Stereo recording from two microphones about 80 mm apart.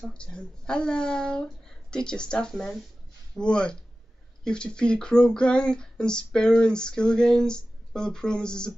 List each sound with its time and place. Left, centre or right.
0.0 s speech: centre